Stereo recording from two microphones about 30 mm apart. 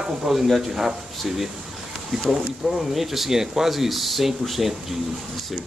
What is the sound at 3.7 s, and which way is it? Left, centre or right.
Speech, centre.